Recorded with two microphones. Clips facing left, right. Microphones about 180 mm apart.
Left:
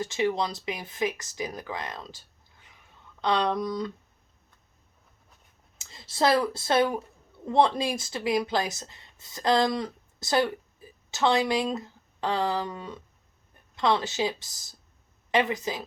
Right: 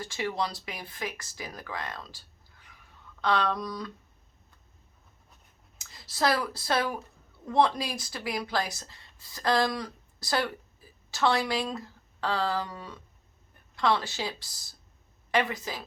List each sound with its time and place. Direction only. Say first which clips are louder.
0.0 s speech: left 5 dB; 20° left (ahead or behind)
5.8 s speech: left 3 dB; 25° left (ahead or behind)